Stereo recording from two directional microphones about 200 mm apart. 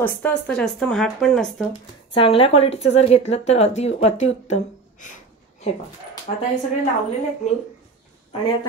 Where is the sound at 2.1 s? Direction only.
30° left (ahead or behind).